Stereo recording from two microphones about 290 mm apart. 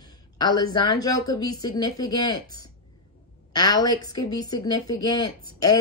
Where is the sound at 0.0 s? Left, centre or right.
Centre.